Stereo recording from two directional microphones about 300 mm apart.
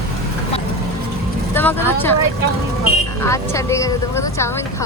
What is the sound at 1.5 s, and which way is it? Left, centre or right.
Speech, centre.